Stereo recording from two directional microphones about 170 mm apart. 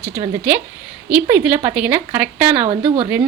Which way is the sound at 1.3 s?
5° right (ahead or behind).